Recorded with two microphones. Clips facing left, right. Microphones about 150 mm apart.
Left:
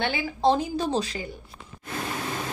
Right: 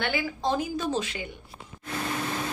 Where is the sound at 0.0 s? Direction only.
25° left (ahead or behind).